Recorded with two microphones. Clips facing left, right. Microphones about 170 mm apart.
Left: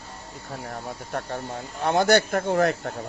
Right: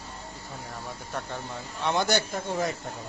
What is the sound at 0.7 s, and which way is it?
Speech, 55° left (ahead or behind).